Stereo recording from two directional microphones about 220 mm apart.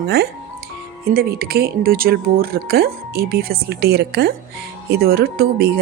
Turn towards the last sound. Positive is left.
turn(degrees=-45)  # may be behind; listen again after turning